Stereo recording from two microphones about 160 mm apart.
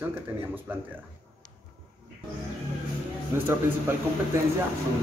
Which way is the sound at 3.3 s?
15° right (ahead or behind).